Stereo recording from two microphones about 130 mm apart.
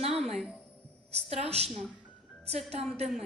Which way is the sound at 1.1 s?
55° right (ahead or behind).